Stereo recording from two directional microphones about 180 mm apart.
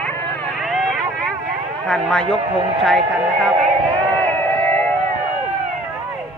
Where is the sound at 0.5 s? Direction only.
Centre (ahead or behind).